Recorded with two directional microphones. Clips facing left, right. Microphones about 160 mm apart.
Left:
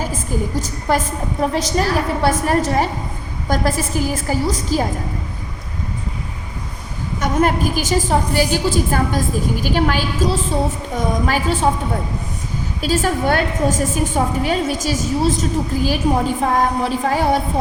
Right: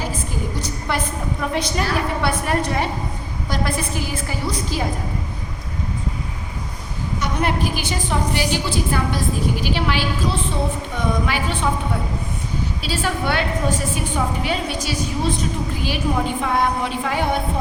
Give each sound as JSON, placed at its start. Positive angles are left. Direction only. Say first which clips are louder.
{"t": 0.9, "sound": "a woman's voice", "louder": "left 5 dB", "side_deg": 40}
{"t": 7.2, "sound": "a woman's voice", "louder": "left 5 dB", "side_deg": 45}
{"t": 12.8, "sound": "a woman's voice", "louder": "left 7 dB", "side_deg": 45}